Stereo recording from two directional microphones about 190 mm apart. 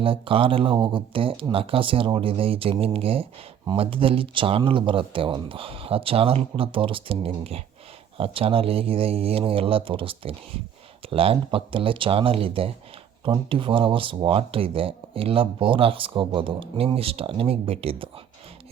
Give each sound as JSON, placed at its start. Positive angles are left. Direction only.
{"t": 0.0, "sound": "speech", "side_deg": -30}